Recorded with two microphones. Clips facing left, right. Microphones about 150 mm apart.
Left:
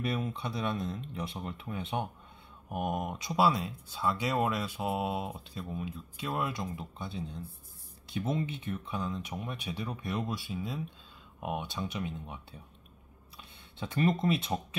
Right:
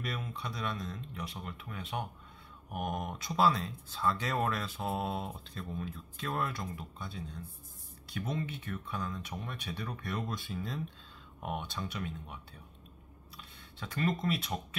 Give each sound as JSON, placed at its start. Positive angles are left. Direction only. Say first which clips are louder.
{"t": 0.0, "sound": "speech", "louder": "left 6 dB", "side_deg": 25}
{"t": 2.7, "sound": "speech", "louder": "left 3 dB", "side_deg": 10}
{"t": 13.4, "sound": "speech", "louder": "left 5 dB", "side_deg": 20}